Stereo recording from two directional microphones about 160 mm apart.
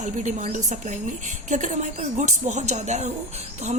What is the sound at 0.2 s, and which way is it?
Speech, 50° right (ahead or behind).